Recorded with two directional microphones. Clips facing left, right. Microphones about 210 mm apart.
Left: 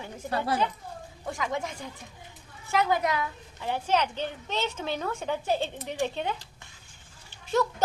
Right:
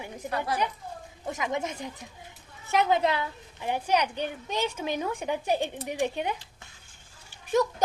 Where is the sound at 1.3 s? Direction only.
20° right (ahead or behind).